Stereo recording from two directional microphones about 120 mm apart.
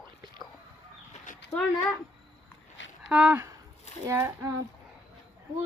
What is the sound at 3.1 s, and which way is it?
Speech, 10° right (ahead or behind).